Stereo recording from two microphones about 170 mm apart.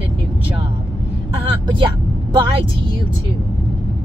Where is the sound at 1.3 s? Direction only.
30° right (ahead or behind).